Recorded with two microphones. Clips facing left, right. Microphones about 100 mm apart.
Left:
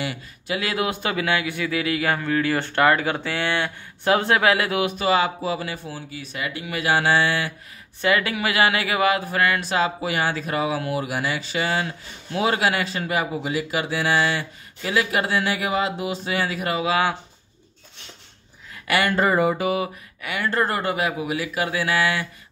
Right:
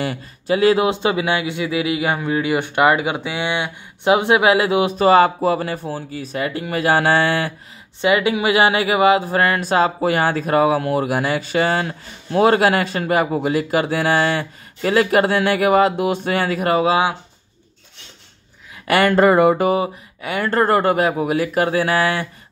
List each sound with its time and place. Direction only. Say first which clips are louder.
0.0 s a man's voice: right 5 dB; 35° right (ahead or behind)
4.9 s speech: right 11 dB; 40° right (ahead or behind)
8.0 s speech: right 5 dB; 20° right (ahead or behind); by 16.9 s 45° right (ahead or behind)
18.9 s speech: right 6 dB; 40° right (ahead or behind)
19.1 s a sound: right 9 dB; 60° right (ahead or behind); by 19.8 s 45° right (ahead or behind)
19.8 s speech: right 5 dB; 30° right (ahead or behind)
20.3 s speech: right 7 dB; 45° right (ahead or behind)